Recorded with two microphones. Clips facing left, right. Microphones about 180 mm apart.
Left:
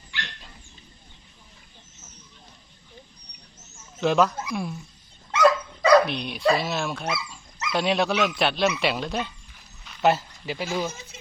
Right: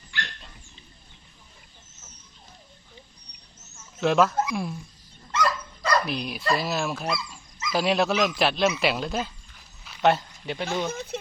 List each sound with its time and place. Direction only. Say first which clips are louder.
4.0 s speech: even; centre (ahead or behind)
5.3 s dog: left 7 dB; 75° left (ahead or behind)
6.1 s speech: left 4 dB; centre (ahead or behind)
11.1 s a sound: right 14 dB; 60° right (ahead or behind)